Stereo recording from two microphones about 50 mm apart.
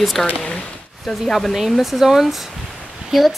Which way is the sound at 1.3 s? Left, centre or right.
Centre.